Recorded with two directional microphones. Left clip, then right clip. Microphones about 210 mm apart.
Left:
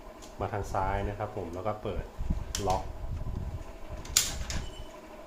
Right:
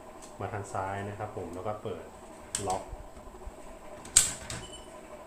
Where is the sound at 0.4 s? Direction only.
35° left (ahead or behind).